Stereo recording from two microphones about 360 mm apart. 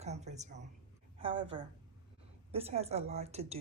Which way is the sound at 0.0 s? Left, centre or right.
Centre.